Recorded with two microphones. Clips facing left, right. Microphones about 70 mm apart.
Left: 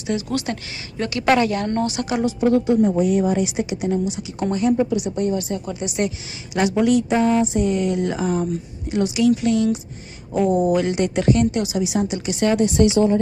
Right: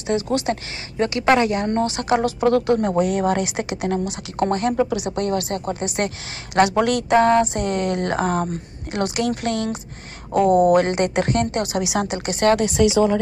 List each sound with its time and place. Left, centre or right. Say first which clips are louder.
0.0 s speech: right 2 dB; right
1.8 s a woman's voice: right 2 dB; right
2.2 s a woman's voice: left 3 dB; right
5.7 s a woman's voice: left 1 dB; right
11.8 s speech: left 1 dB; right
12.1 s a woman's voice: right 2 dB; right